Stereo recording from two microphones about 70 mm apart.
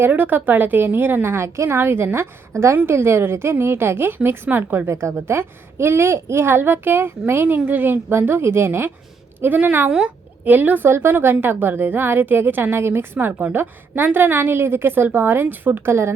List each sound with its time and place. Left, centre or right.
0.0 s a woman's voice: right
4.9 s a woman's voice: right